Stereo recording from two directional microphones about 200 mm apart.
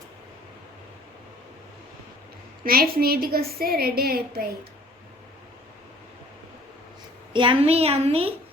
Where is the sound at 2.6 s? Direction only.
50° right (ahead or behind).